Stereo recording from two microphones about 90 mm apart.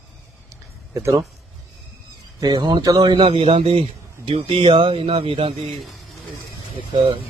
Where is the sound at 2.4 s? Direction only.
45° right (ahead or behind).